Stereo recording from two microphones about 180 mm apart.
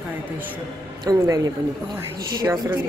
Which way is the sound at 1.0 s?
20° right (ahead or behind).